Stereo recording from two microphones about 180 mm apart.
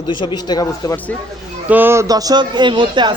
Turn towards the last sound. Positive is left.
turn(degrees=-25)  # may be behind; listen again after turning